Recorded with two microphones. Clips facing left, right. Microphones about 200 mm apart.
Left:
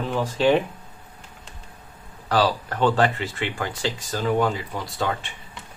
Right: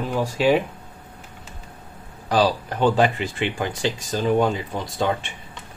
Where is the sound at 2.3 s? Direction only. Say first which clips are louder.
Right 2 dB; 15° right (ahead or behind).